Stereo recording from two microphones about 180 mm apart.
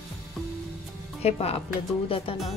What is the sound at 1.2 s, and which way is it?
Speech, 35° left (ahead or behind).